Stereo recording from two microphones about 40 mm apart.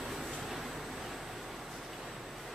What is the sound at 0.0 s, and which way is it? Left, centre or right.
Vehicle, centre.